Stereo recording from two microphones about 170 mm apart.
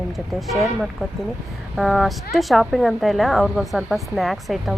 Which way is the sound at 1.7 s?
Centre (ahead or behind).